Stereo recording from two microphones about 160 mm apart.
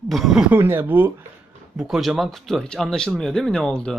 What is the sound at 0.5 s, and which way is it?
Speech, 15° right (ahead or behind).